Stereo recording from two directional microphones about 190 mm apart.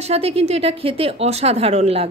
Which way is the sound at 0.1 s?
30° right (ahead or behind).